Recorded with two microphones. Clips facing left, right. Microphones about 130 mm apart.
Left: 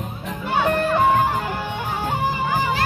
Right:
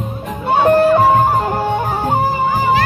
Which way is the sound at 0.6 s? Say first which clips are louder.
Right 8 dB; 35° right (ahead or behind).